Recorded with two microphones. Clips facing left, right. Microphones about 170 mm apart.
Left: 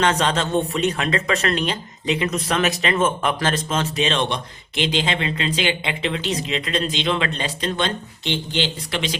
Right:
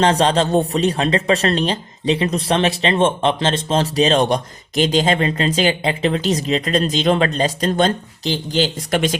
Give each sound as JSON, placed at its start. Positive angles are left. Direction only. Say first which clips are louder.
{"t": 0.0, "sound": "speech", "louder": "right 5 dB", "side_deg": -35}